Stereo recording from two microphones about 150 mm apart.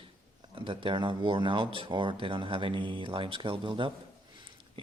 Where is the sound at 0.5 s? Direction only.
35° right (ahead or behind).